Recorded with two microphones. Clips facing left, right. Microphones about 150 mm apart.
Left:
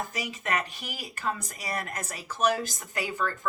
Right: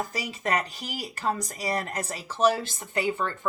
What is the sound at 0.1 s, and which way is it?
Speech, 35° right (ahead or behind).